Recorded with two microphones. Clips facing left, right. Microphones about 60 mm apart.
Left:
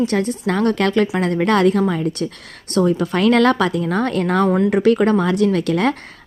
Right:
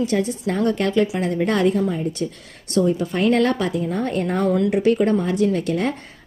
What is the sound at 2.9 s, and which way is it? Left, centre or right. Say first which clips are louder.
A woman's voice: left 5 dB; left.